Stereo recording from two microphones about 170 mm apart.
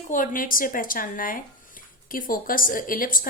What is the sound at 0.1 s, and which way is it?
Speech, 55° left (ahead or behind).